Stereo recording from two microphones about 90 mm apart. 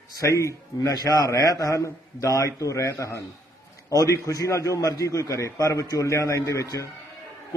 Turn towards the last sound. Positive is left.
turn(degrees=35)  # may be behind; listen again after turning